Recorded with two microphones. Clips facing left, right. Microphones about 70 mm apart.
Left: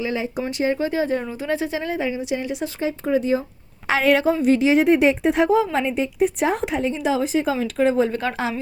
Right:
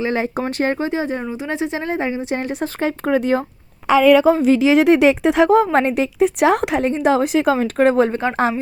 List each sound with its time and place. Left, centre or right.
0.0 s speech: right
0.8 s a woman's voice: right
2.8 s speech: right
4.4 s a woman's voice: right
5.7 s a woman's voice: right
6.9 s speech: right
8.1 s a woman's voice: right